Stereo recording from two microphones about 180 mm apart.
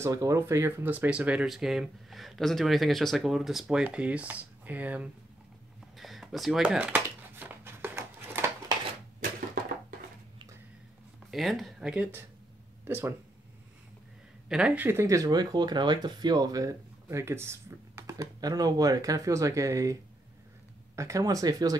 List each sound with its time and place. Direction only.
0.0 s speech: 15° right (ahead or behind)
5.9 s a sound: centre (ahead or behind)
11.2 s speech: centre (ahead or behind)
14.5 s speech: 10° right (ahead or behind)